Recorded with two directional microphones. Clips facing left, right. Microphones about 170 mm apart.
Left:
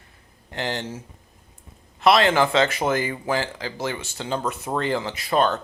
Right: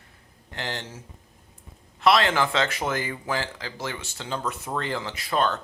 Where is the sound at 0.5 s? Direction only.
20° left (ahead or behind).